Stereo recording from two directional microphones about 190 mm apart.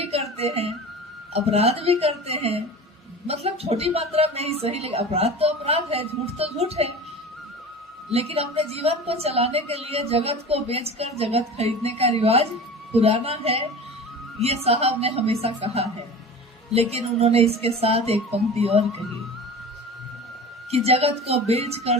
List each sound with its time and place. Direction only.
0.0 s music: 30° right (ahead or behind)
1.3 s a woman's voice: 30° right (ahead or behind)
8.1 s a woman's voice: 30° right (ahead or behind)
20.7 s a woman's voice: 35° right (ahead or behind)